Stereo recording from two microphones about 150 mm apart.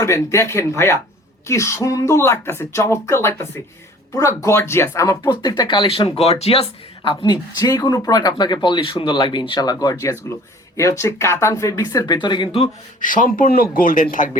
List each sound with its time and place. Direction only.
0.0 s speech: 20° left (ahead or behind); by 12.7 s 40° left (ahead or behind)
13.0 s a man's voice: 60° left (ahead or behind)